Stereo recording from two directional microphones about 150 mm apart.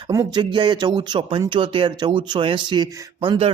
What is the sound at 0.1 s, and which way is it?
Speech, 25° right (ahead or behind).